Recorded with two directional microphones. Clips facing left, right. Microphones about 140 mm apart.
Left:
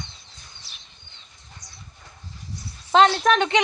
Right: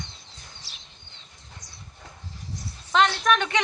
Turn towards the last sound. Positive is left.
turn(degrees=30)  # may be behind; listen again after turning